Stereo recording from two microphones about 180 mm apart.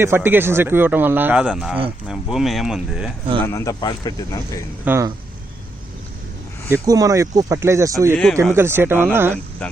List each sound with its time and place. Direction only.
0.0 s a man's voice: 15° right (ahead or behind)
3.4 s speech: 15° left (ahead or behind)
4.9 s a man's voice: 15° right (ahead or behind)
6.8 s a man's voice: 20° right (ahead or behind)
8.1 s speech: 5° left (ahead or behind)
8.5 s a man's voice: 15° right (ahead or behind)